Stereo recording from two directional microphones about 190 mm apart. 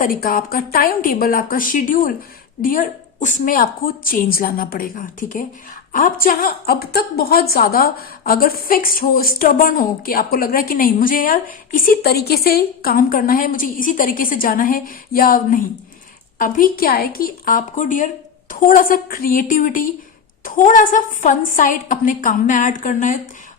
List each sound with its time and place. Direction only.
0.0 s a woman's voice: 50° left (ahead or behind)